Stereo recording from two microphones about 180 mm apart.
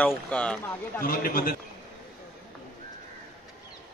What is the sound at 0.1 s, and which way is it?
Speech, 5° left (ahead or behind).